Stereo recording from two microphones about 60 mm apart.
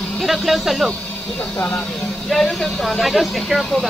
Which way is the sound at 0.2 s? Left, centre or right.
Centre.